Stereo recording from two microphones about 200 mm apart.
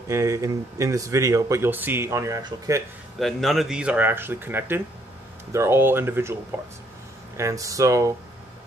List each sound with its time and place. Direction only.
0.1 s speech: 15° right (ahead or behind)
3.2 s speech: centre (ahead or behind); by 8.1 s 15° right (ahead or behind)